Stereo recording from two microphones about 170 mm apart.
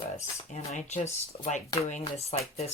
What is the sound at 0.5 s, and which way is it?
Speech, 40° left (ahead or behind).